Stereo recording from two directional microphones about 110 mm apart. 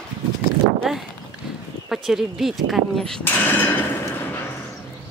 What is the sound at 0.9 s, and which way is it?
Speech, 5° right (ahead or behind).